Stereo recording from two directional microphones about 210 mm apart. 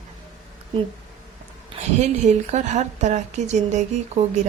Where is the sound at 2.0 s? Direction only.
35° right (ahead or behind).